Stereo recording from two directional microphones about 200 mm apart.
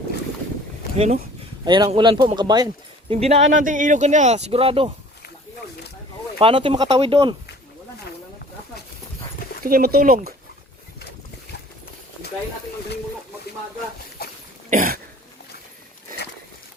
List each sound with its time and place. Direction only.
0.9 s speech: 30° right (ahead or behind)
3.1 s speech: 30° right (ahead or behind)
6.4 s speech: 25° right (ahead or behind)
9.6 s speech: 50° right (ahead or behind)
14.2 s cough: 50° left (ahead or behind)
14.7 s cough: 45° right (ahead or behind)